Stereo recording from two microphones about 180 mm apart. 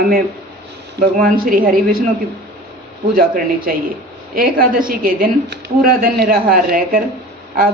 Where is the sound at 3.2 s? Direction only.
50° right (ahead or behind).